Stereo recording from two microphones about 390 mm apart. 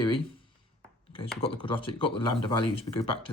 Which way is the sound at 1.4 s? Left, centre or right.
Centre.